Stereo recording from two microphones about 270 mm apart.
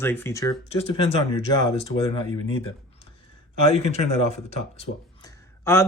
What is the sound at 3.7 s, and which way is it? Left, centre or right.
Speech, left.